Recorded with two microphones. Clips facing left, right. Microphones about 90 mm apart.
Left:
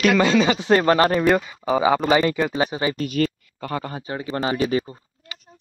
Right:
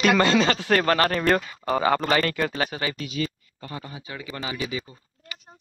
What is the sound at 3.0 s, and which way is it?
Speech, 50° left (ahead or behind).